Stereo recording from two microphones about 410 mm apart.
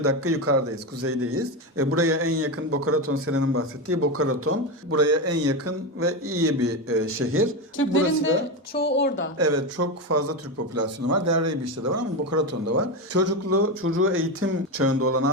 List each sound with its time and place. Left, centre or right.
0.0 s speech: right
7.8 s speech: left
9.4 s speech: right